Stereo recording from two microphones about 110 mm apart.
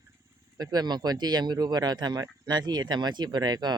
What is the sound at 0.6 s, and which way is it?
Speech, 35° right (ahead or behind).